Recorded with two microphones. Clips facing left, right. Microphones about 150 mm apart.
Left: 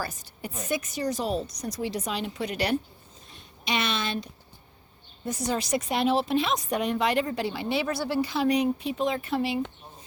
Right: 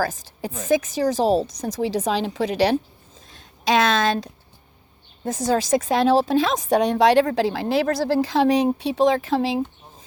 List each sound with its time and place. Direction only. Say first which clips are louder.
0.0 s speech: right 9 dB; 90° right